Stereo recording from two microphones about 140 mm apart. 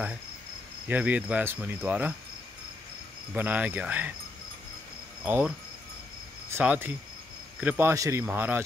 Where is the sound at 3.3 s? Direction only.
10° right (ahead or behind).